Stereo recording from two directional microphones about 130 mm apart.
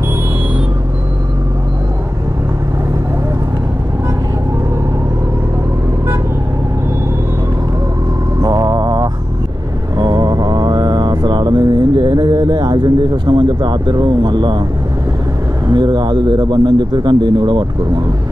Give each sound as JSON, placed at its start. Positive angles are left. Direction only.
{"t": 8.4, "sound": "mantra", "side_deg": -30}
{"t": 15.7, "sound": "speech", "side_deg": -35}